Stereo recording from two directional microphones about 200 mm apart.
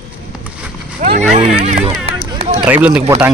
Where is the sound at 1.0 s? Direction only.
35° right (ahead or behind).